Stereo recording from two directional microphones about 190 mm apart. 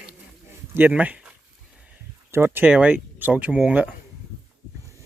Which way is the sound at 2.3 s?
10° right (ahead or behind).